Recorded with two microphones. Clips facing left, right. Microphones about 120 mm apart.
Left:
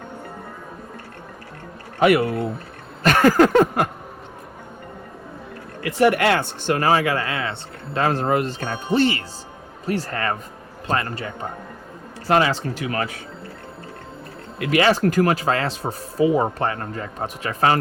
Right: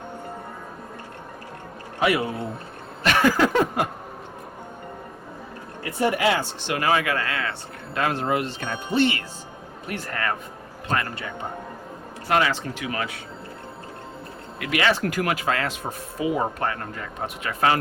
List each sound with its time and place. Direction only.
2.0 s a man's voice: 55° left (ahead or behind)
3.0 s a sound: 45° left (ahead or behind)
5.8 s speech: 75° left (ahead or behind); by 7.5 s 25° left (ahead or behind)
7.9 s speech: 35° left (ahead or behind)
12.3 s speech: 30° left (ahead or behind)
14.6 s speech: 35° left (ahead or behind)